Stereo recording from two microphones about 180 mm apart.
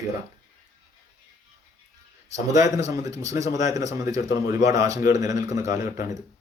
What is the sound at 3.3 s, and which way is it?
Speech, 40° left (ahead or behind).